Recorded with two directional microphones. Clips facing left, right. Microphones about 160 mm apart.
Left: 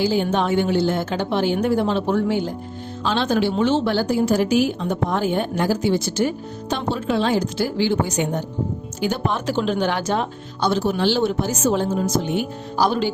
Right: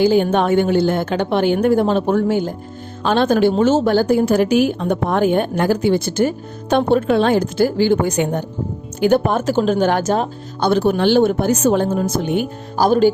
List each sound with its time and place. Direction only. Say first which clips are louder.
0.0 s a woman's voice: right 5 dB; 55° right (ahead or behind)